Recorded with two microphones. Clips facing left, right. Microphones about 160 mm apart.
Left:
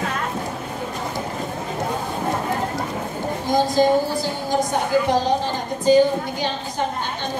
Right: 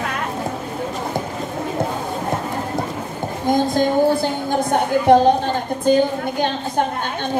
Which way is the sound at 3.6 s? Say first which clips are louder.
Even; 55° right (ahead or behind).